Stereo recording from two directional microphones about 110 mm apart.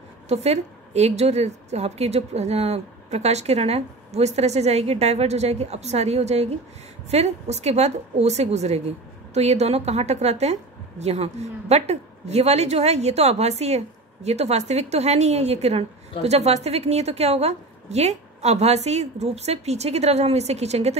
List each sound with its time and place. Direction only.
0.3 s a woman's voice: 90° right
7.1 s a woman's voice: 90° right